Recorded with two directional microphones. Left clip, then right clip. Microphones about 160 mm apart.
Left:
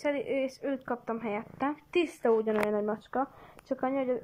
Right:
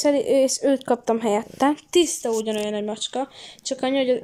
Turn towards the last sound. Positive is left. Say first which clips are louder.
# right 9 dB
turn(degrees=-35)  # may be behind; listen again after turning